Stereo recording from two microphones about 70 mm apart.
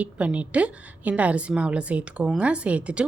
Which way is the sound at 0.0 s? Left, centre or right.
Centre.